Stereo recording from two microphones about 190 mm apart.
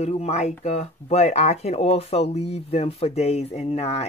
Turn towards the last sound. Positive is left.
turn(degrees=30)  # may be behind; listen again after turning